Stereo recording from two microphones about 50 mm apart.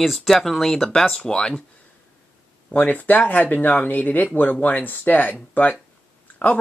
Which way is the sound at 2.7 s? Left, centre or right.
Left.